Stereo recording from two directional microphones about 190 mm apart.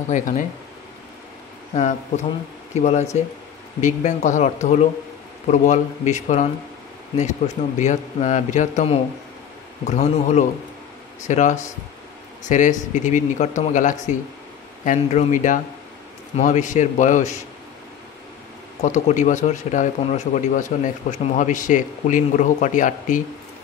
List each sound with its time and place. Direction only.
0.1 s speech: 40° left (ahead or behind)
1.7 s a man's voice: 35° left (ahead or behind)
18.8 s speech: 35° left (ahead or behind)